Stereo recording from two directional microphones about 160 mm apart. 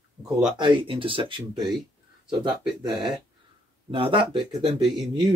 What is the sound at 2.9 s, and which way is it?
Speech, 5° right (ahead or behind).